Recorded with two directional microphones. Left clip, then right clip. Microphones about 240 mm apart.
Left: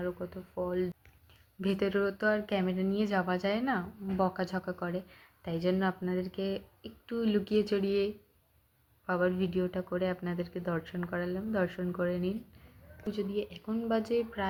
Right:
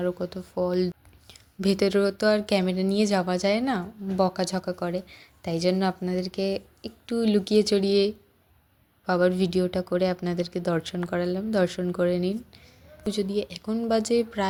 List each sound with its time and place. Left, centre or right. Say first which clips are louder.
0.0 s speech: right 8 dB; right